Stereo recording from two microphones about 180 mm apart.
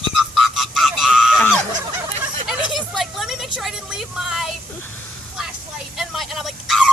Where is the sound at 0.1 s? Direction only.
Centre (ahead or behind).